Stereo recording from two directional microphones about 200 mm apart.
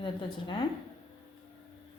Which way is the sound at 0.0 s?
25° left (ahead or behind).